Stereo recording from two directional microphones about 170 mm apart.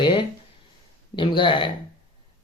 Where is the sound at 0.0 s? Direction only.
30° left (ahead or behind).